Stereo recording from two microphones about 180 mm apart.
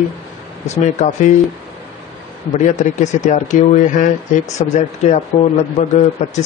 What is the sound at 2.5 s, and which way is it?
A man's voice, 45° left (ahead or behind).